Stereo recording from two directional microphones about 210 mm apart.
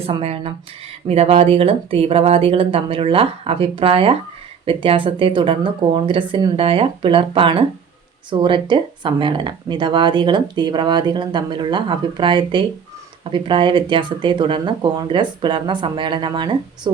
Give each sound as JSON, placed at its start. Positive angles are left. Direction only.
{"t": 0.0, "sound": "speech", "side_deg": -30}